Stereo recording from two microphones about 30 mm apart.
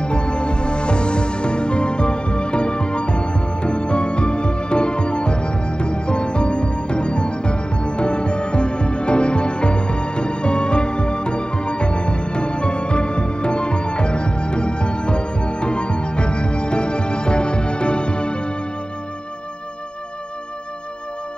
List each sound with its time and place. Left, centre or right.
0.0 s music: left